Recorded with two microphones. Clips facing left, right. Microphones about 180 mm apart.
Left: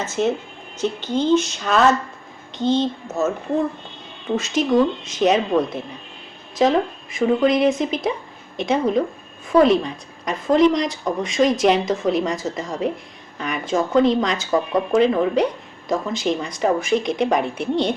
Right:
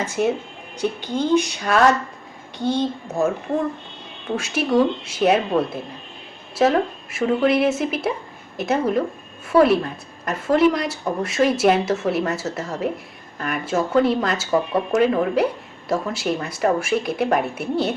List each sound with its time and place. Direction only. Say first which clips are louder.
0.0 s a woman's voice: even; 10° right (ahead or behind)
4.4 s a woman's voice: left 1 dB; 10° right (ahead or behind)